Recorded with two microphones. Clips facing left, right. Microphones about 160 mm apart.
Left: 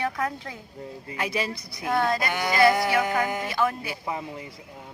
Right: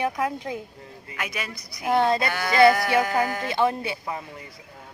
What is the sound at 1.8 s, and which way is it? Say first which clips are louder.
Speech: right 3 dB; 25° right (ahead or behind).